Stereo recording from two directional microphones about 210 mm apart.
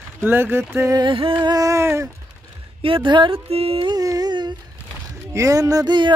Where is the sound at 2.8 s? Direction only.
25° right (ahead or behind).